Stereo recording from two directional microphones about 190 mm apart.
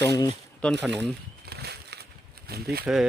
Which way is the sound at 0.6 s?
5° left (ahead or behind).